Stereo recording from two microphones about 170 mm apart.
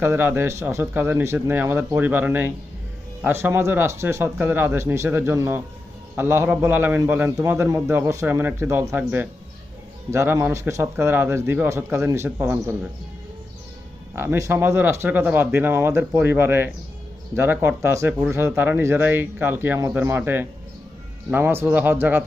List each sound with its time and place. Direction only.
0.0 s speech: 15° right (ahead or behind)
14.2 s speech: 15° right (ahead or behind)